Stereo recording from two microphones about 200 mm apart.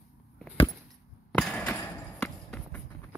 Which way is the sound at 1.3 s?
5° left (ahead or behind).